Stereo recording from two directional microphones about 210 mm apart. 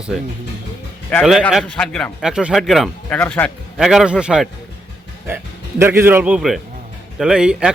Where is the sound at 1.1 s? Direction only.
Centre (ahead or behind).